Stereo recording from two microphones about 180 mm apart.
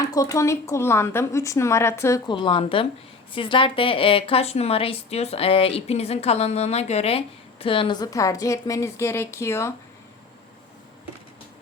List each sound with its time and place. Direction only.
0.0 s a woman's voice: 20° left (ahead or behind)